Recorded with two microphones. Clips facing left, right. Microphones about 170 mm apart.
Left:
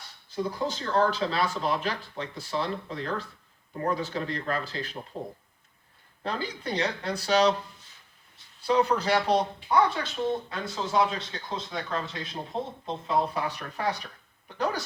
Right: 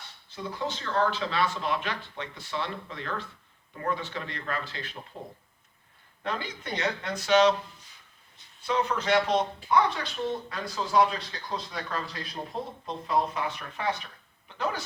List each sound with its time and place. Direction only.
0.3 s speech: 40° left (ahead or behind)
6.2 s speech: 35° left (ahead or behind)
8.6 s speech: 35° left (ahead or behind)
13.1 s speech: 35° left (ahead or behind)